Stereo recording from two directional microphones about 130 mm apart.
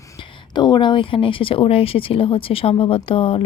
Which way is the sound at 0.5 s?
35° left (ahead or behind).